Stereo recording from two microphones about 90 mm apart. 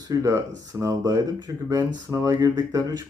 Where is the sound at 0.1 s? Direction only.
35° right (ahead or behind).